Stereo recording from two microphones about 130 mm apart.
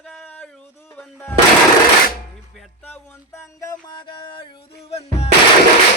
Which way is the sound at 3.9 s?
40° left (ahead or behind).